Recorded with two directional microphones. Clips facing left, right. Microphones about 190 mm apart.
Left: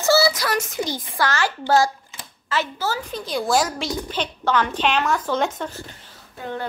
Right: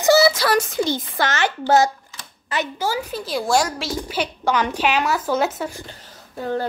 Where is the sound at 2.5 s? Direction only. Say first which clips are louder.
Right 1 dB; 15° right (ahead or behind).